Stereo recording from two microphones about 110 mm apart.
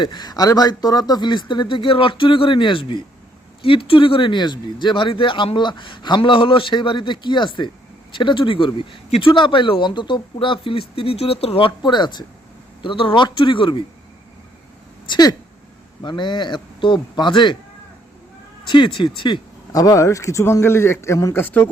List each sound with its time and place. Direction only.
0.0 s speech: 40° left (ahead or behind)
9.0 s speech: 65° left (ahead or behind)
9.3 s speech: 50° left (ahead or behind)
15.1 s speech: 40° left (ahead or behind)
18.6 s speech: 50° left (ahead or behind)
19.7 s speech: 35° left (ahead or behind)
21.3 s speech: 20° left (ahead or behind)